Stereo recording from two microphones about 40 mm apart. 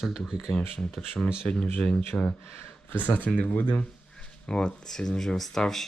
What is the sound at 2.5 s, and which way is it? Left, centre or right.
Speech, left.